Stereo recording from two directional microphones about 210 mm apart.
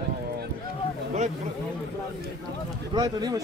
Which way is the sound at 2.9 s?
20° right (ahead or behind).